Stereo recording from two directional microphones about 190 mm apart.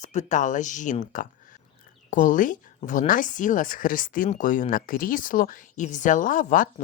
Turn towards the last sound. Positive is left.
turn(degrees=45)  # may be behind; listen again after turning